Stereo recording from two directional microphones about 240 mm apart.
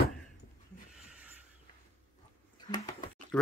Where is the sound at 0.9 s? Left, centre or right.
Centre.